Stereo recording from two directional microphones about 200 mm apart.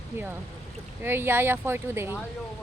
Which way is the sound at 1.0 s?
10° right (ahead or behind).